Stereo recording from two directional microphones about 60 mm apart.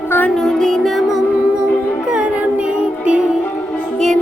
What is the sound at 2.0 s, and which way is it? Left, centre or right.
Music, centre.